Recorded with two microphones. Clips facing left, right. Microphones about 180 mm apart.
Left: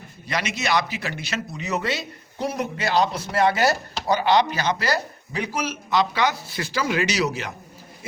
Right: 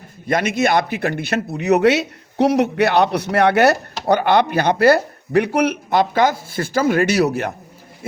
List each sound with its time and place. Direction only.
0.3 s a man's voice: 50° right (ahead or behind)